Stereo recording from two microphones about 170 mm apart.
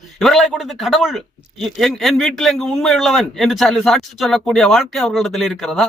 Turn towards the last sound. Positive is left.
turn(degrees=0)  # may be behind; listen again after turning